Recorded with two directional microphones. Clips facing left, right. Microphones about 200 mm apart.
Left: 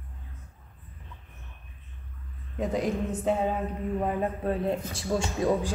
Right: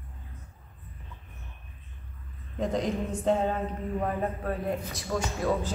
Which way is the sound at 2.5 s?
5° left (ahead or behind).